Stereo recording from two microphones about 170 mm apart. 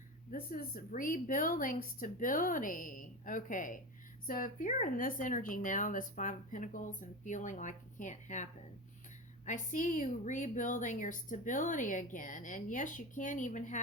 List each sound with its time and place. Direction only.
0.3 s a woman's voice: 55° left (ahead or behind)
9.5 s a woman's voice: 50° left (ahead or behind)